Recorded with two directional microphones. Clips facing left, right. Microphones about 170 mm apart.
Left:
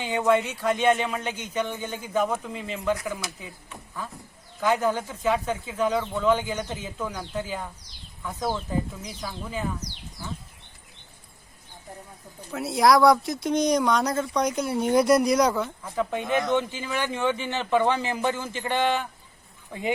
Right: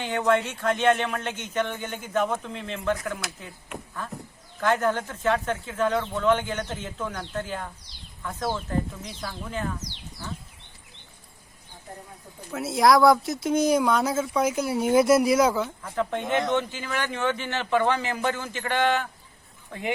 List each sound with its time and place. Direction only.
0.0 s speech: 15° left (ahead or behind)
4.6 s speech: 10° left (ahead or behind)
9.2 s speech: 10° left (ahead or behind)
12.5 s speech: centre (ahead or behind)
15.8 s speech: 10° left (ahead or behind)